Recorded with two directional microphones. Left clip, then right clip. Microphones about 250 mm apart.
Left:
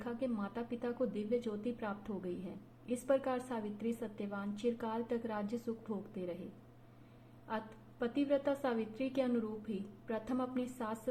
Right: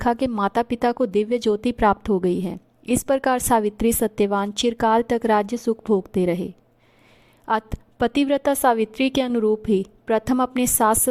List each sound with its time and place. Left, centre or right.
0.0 s a woman's voice: right
7.4 s a woman's voice: right